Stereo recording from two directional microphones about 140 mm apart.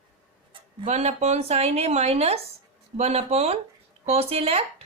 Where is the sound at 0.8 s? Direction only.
55° right (ahead or behind).